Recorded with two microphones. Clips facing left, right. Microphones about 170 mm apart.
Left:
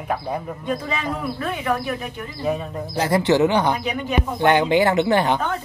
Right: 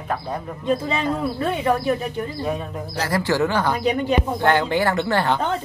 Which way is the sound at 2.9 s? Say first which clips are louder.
Left 4 dB; 20° left (ahead or behind).